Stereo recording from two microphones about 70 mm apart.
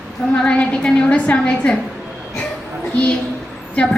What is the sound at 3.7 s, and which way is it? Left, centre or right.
Speech, centre.